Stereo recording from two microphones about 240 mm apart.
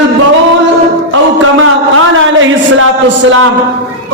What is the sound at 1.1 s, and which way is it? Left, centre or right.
A man's voice, right.